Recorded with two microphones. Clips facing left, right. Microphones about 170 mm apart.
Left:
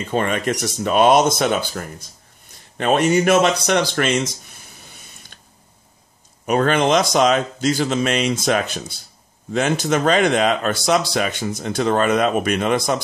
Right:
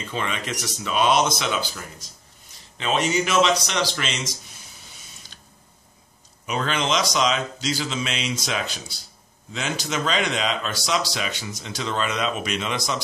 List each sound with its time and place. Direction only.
0.0 s speech: 50° left (ahead or behind)
4.8 s a sound: 55° left (ahead or behind)
6.4 s speech: 50° left (ahead or behind)